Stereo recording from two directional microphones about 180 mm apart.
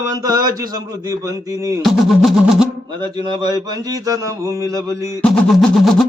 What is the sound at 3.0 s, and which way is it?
Speech, 25° right (ahead or behind).